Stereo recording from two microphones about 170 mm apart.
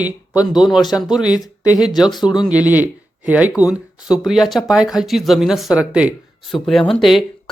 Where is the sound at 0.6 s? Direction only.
Centre (ahead or behind).